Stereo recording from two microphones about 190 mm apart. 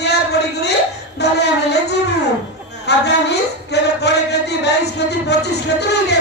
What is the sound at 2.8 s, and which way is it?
Speech, 60° left (ahead or behind).